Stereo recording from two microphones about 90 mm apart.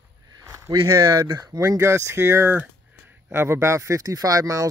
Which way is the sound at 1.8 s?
30° right (ahead or behind).